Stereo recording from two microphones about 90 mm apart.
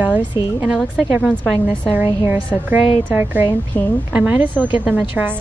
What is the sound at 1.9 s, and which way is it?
A woman's voice, 20° right (ahead or behind).